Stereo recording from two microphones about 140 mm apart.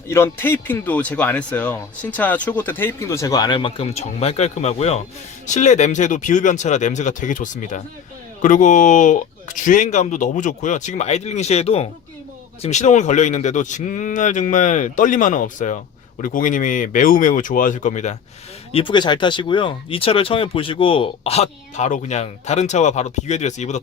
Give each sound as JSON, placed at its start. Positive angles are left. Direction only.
{"t": 0.1, "sound": "speech", "side_deg": 20}
{"t": 18.7, "sound": "speech", "side_deg": 35}